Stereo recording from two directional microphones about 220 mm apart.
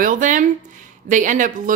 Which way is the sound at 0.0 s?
35° right (ahead or behind).